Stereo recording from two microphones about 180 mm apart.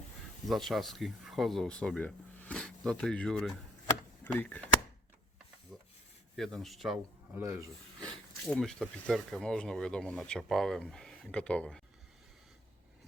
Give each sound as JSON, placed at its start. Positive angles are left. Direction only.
{"t": 0.4, "sound": "speech", "side_deg": 0}
{"t": 6.3, "sound": "a man's voice", "side_deg": 0}
{"t": 7.4, "sound": "speech", "side_deg": -15}
{"t": 8.0, "sound": "speech", "side_deg": 5}